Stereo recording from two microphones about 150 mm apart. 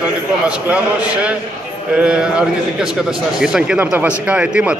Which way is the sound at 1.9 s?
5° right (ahead or behind).